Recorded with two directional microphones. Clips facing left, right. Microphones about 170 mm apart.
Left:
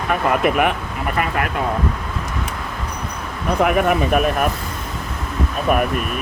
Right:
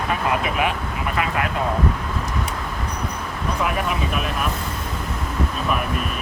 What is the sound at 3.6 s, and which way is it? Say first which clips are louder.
Speech: left 8 dB; 60° left (ahead or behind).